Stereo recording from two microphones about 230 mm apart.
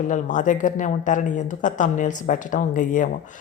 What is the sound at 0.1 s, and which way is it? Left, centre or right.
Speech, left.